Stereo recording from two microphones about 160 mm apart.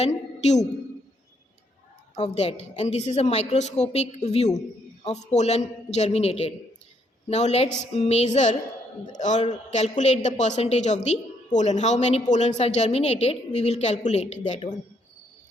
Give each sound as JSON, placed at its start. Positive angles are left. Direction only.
{"t": 0.0, "sound": "a woman's voice", "side_deg": 45}
{"t": 2.1, "sound": "a woman's voice", "side_deg": 40}